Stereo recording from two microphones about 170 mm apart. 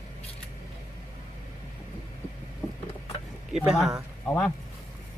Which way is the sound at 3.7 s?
Centre (ahead or behind).